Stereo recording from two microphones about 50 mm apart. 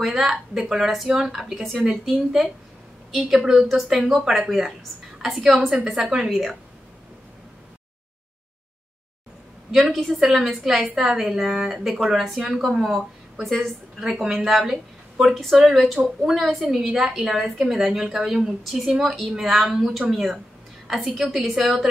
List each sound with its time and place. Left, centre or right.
0.0 s a woman's voice: centre
3.6 s a woman's voice: centre
9.7 s a woman's voice: centre
12.8 s speech: centre
14.2 s a woman's voice: centre